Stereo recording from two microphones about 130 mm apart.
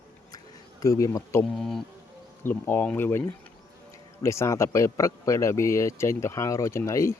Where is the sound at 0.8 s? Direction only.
25° left (ahead or behind).